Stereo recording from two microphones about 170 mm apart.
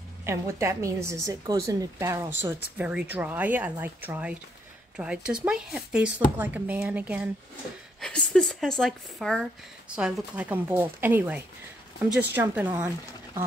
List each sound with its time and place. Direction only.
0.2 s a woman's voice: 15° right (ahead or behind)
8.0 s a woman's voice: 5° left (ahead or behind); by 12.9 s 10° right (ahead or behind)